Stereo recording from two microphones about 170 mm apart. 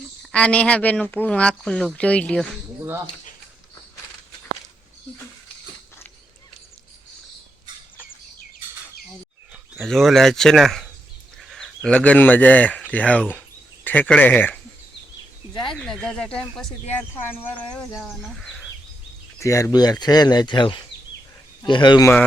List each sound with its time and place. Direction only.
0.3 s speech: 5° left (ahead or behind)
9.8 s speech: centre (ahead or behind)
17.9 s speech: centre (ahead or behind)
19.4 s speech: 20° left (ahead or behind)